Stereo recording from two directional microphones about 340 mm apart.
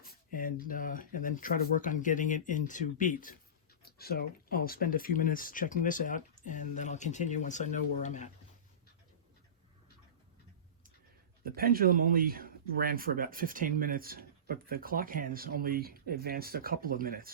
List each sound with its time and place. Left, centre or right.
0.0 s speech: left
11.4 s speech: right